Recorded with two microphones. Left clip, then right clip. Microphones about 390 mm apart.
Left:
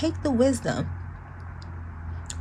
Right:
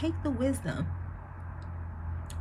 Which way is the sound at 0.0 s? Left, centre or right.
Centre.